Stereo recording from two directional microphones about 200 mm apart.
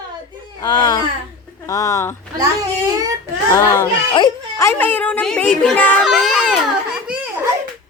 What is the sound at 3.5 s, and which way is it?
A child's voice, 15° left (ahead or behind).